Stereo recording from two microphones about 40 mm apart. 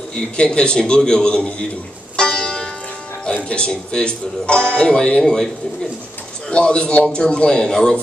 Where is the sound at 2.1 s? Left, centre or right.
Left.